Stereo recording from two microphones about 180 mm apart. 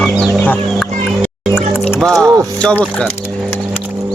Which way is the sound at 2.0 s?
5° left (ahead or behind).